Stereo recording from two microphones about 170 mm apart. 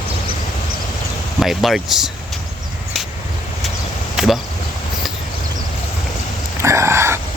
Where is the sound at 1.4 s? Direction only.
Centre (ahead or behind).